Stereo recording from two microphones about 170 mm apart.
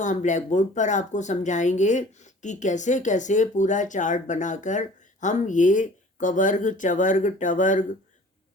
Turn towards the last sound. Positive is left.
turn(degrees=50)  # may be behind; listen again after turning